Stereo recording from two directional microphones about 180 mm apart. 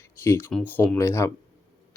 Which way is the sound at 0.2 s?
15° left (ahead or behind).